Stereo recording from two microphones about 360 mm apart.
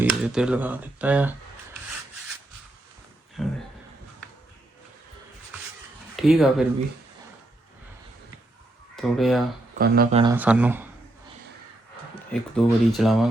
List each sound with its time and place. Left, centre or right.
0.0 s speech: centre
3.4 s speech: centre
6.1 s speech: centre
9.0 s speech: centre
9.7 s speech: right
10.3 s speech: centre
12.3 s speech: centre